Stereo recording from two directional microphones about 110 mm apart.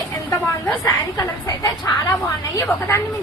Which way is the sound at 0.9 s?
35° left (ahead or behind).